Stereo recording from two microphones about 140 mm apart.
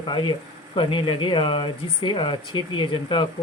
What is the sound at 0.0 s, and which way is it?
Speech, 35° left (ahead or behind).